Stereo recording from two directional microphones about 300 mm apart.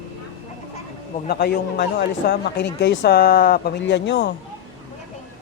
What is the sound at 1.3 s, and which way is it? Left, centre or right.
Speech, left.